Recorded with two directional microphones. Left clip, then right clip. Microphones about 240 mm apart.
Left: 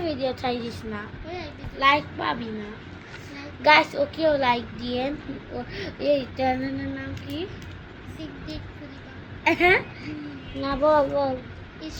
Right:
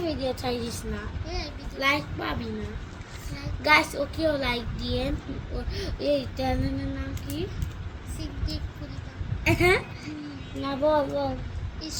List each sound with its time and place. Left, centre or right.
0.0 s a woman's voice: centre
1.8 s a child's voice: centre
3.6 s a child's voice: centre
9.4 s speech: centre
10.6 s speech: centre